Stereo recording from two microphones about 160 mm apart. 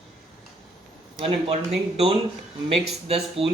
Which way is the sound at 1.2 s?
35° right (ahead or behind).